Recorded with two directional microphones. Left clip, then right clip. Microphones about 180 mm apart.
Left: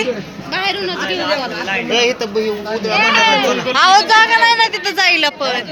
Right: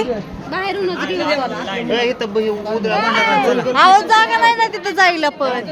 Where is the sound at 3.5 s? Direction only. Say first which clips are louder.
Even; 10° right (ahead or behind).